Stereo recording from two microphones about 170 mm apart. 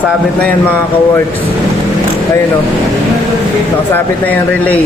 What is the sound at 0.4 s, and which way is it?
Speech, 10° left (ahead or behind).